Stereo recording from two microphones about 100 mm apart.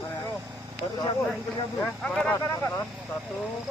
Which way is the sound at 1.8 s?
15° left (ahead or behind).